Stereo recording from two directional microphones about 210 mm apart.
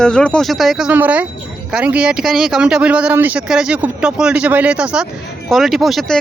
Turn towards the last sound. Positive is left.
turn(degrees=0)  # may be behind; listen again after turning